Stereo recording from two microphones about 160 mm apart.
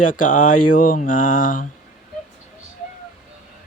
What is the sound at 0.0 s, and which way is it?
Speech, 55° left (ahead or behind).